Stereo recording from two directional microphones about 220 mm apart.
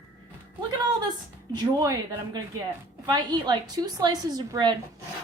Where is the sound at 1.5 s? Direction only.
15° right (ahead or behind).